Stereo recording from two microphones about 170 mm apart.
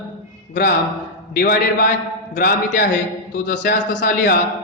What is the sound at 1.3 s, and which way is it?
A man's voice, 60° left (ahead or behind).